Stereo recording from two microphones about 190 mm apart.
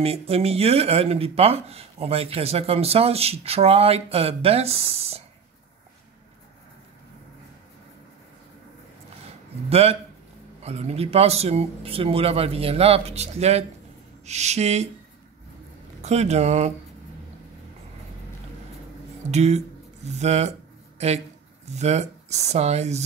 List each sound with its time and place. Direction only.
0.0 s speech: 30° right (ahead or behind)
9.7 s speech: 30° right (ahead or behind)
16.0 s speech: 35° right (ahead or behind)
19.3 s speech: 35° right (ahead or behind)